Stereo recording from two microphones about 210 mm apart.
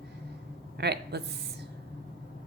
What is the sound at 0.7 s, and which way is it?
Speech, 50° right (ahead or behind).